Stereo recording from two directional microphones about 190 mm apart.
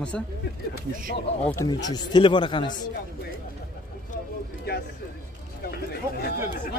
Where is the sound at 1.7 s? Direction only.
20° left (ahead or behind).